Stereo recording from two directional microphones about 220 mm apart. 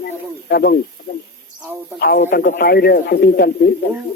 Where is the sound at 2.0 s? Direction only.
45° left (ahead or behind).